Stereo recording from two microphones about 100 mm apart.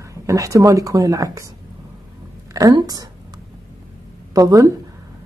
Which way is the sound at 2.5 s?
35° right (ahead or behind).